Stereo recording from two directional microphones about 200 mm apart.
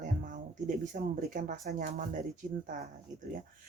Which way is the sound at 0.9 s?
45° right (ahead or behind).